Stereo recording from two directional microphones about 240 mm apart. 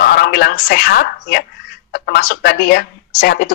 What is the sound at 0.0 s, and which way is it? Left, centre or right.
A woman's voice, left.